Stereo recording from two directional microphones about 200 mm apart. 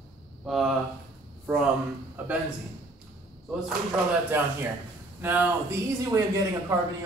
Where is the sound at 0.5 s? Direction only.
Centre (ahead or behind).